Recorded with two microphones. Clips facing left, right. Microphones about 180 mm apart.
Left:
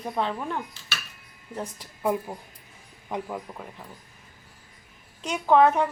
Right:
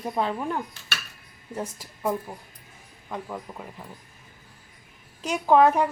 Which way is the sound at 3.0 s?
15° left (ahead or behind).